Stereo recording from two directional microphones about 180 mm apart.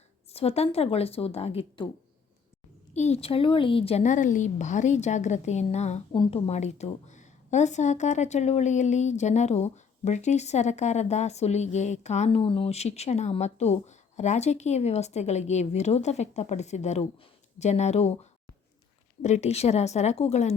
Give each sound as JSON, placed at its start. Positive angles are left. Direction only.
{"t": 0.3, "sound": "a woman's voice", "side_deg": 35}
{"t": 2.9, "sound": "a woman's voice", "side_deg": 35}